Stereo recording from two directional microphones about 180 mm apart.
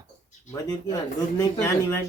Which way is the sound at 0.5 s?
20° left (ahead or behind).